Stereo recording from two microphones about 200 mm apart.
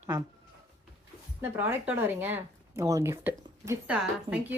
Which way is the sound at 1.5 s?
10° right (ahead or behind).